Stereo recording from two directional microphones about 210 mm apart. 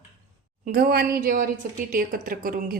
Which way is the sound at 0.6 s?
45° right (ahead or behind).